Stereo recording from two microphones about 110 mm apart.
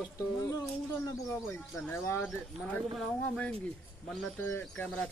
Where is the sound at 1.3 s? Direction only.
15° left (ahead or behind).